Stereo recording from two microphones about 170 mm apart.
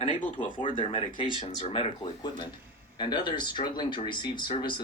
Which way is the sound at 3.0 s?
25° left (ahead or behind).